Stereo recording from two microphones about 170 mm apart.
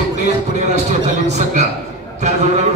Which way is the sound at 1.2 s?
40° right (ahead or behind).